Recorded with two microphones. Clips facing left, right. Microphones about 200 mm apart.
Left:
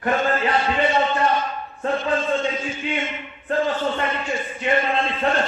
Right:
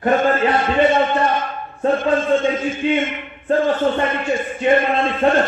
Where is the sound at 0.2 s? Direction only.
50° right (ahead or behind).